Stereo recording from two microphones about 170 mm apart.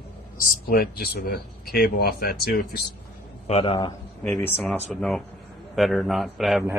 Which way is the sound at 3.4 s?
35° left (ahead or behind).